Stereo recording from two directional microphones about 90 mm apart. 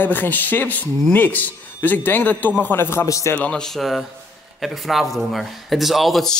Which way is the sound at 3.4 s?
10° left (ahead or behind).